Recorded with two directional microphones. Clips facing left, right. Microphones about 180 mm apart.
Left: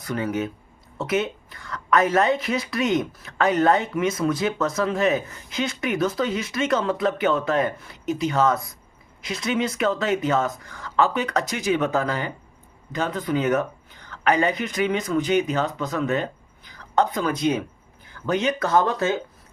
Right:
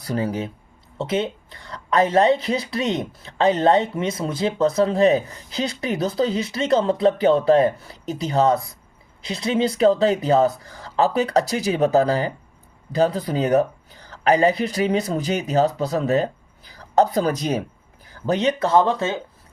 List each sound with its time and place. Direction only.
0.0 s speech: 35° right (ahead or behind)